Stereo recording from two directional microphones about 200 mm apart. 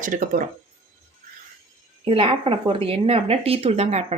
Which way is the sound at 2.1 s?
25° right (ahead or behind).